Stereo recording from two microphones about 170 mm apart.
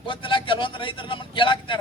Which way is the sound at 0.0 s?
30° left (ahead or behind).